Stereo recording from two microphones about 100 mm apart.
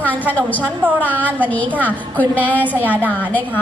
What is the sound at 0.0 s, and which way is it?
A woman's voice, 15° left (ahead or behind).